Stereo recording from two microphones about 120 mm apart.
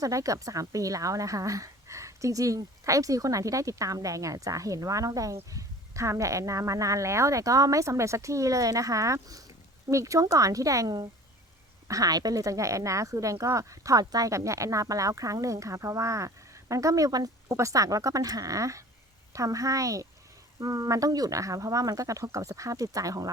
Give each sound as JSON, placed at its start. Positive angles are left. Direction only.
{"t": 0.0, "sound": "speech", "side_deg": -30}